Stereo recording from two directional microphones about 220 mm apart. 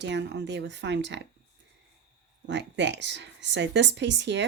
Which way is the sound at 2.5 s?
55° right (ahead or behind).